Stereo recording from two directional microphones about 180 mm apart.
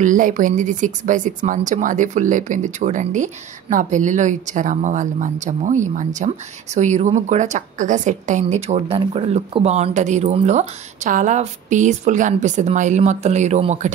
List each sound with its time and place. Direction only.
0.0 s speech: 45° right (ahead or behind)